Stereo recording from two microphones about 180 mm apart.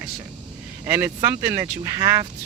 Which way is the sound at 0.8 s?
15° right (ahead or behind).